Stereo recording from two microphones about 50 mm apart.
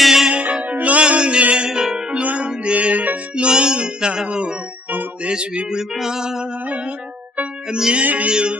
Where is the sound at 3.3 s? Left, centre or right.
Centre.